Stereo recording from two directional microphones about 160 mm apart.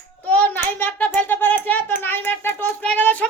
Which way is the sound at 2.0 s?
15° left (ahead or behind).